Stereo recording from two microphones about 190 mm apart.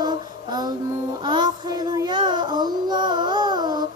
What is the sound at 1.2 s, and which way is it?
Child singing, 25° right (ahead or behind).